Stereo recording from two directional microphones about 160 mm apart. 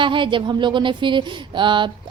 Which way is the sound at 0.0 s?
30° right (ahead or behind).